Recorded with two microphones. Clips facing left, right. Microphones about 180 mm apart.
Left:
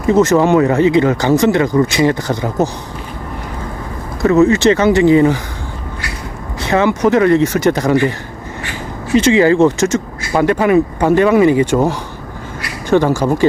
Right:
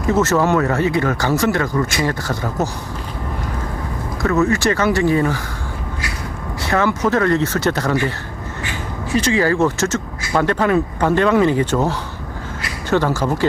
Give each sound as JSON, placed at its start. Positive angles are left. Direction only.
{"t": 0.1, "sound": "speech", "side_deg": 15}
{"t": 4.2, "sound": "speech", "side_deg": 20}
{"t": 6.6, "sound": "speech", "side_deg": 20}
{"t": 9.1, "sound": "speech", "side_deg": 25}